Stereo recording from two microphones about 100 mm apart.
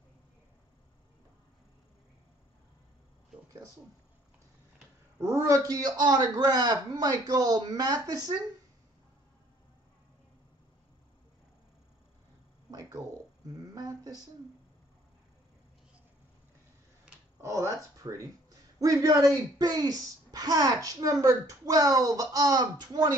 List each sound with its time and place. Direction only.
5.2 s speech: 30° right (ahead or behind)
12.7 s a sound: 35° right (ahead or behind)
13.7 s speech: 40° right (ahead or behind)
17.4 s speech: 30° right (ahead or behind)